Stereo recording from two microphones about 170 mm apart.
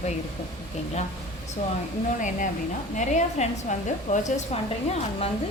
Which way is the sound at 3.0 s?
45° left (ahead or behind).